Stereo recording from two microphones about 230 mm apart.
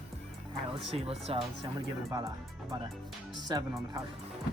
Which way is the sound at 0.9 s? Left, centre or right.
Right.